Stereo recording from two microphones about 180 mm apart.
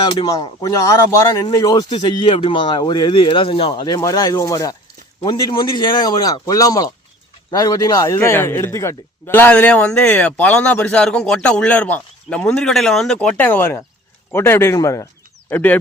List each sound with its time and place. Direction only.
0.0 s a man's voice: 20° left (ahead or behind)